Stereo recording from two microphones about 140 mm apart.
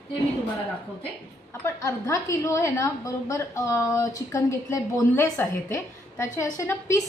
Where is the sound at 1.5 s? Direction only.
20° left (ahead or behind).